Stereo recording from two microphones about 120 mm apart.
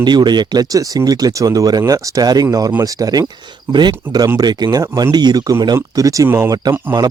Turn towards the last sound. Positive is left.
turn(degrees=-15)  # may be behind; listen again after turning